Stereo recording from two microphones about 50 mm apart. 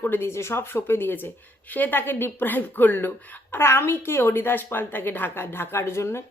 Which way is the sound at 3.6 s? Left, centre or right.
Left.